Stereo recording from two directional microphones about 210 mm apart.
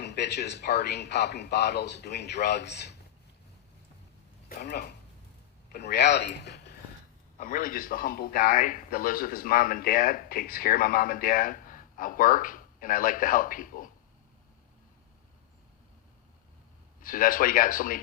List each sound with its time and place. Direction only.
0.0 s speech: 55° left (ahead or behind)
4.4 s speech: 50° left (ahead or behind)
7.3 s speech: 40° left (ahead or behind)
17.0 s speech: 40° left (ahead or behind)